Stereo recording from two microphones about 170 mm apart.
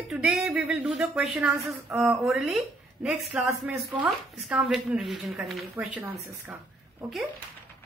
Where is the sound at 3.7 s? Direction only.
15° right (ahead or behind).